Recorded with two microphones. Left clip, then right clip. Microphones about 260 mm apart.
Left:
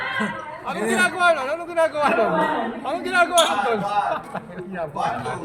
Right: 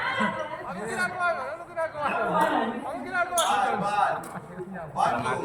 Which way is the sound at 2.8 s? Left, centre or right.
Left.